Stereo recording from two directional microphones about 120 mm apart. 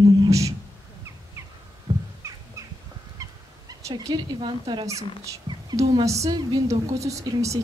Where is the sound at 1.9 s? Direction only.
55° right (ahead or behind).